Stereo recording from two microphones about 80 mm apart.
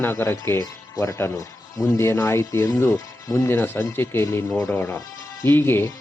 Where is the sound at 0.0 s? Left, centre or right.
Left.